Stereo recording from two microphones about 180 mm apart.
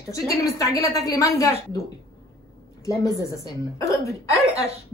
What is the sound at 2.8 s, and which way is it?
A woman's voice, 20° left (ahead or behind).